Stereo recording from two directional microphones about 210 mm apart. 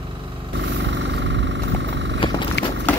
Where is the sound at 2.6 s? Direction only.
55° left (ahead or behind).